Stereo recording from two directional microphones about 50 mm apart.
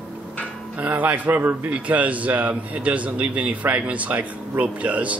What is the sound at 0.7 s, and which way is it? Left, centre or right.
A man's voice, right.